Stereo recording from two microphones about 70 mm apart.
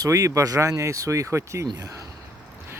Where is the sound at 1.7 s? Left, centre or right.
Right.